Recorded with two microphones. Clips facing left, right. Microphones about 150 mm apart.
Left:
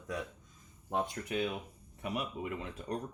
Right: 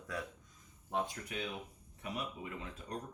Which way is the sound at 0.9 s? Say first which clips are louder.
Left 4 dB; 60° left (ahead or behind).